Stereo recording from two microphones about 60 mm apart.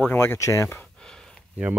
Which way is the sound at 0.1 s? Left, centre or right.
Left.